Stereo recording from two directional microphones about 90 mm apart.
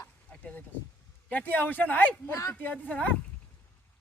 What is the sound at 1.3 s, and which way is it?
A man's voice, 20° left (ahead or behind).